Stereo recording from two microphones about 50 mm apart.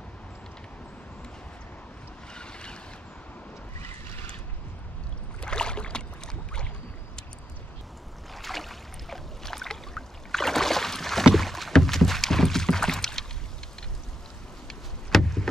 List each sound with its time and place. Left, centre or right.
2.3 s boat: centre
5.4 s boat: centre
8.4 s boat: centre
11.3 s rowboat: centre
14.7 s a sound: centre